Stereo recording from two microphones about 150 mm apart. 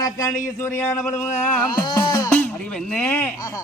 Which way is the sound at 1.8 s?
25° left (ahead or behind).